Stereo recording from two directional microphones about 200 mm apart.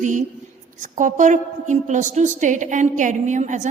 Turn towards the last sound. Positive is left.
turn(degrees=-35)  # may be behind; listen again after turning